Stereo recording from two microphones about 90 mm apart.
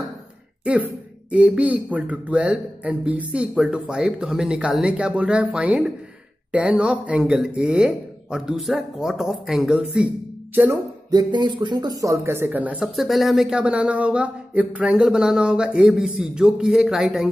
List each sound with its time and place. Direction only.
1.3 s a man's voice: 15° right (ahead or behind)
10.5 s speech: 25° right (ahead or behind)
11.1 s speech: 50° right (ahead or behind); by 12.5 s 30° right (ahead or behind)
12.5 s a man's voice: 15° right (ahead or behind)
12.8 s speech: centre (ahead or behind)
13.6 s a man's voice: 15° right (ahead or behind)